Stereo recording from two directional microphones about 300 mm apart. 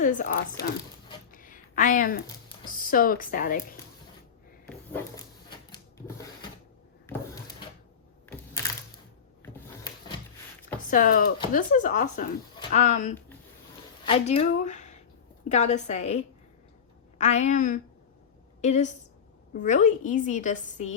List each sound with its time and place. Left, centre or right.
0.0 s speech: left
1.3 s a sound: left
2.6 s a woman's voice: left
4.7 s printer: centre
9.4 s a sound: centre
10.8 s a woman's voice: left